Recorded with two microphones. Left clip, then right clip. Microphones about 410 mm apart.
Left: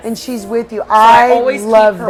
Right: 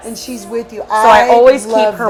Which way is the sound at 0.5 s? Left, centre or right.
Left.